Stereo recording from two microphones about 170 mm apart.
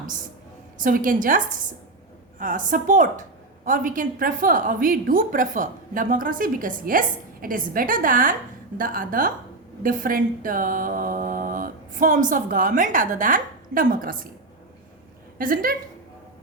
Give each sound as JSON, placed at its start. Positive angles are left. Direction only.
{"t": 0.8, "sound": "a woman's voice", "side_deg": -55}
{"t": 15.4, "sound": "a woman's voice", "side_deg": -55}